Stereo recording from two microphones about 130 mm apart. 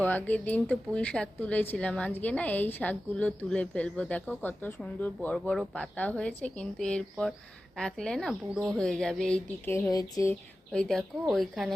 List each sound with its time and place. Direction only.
0.0 s speech: 15° left (ahead or behind)
9.9 s speech: 25° left (ahead or behind)
10.7 s speech: 5° left (ahead or behind)